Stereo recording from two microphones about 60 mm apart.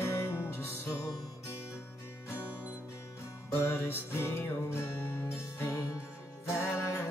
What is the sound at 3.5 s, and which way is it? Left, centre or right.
Music, left.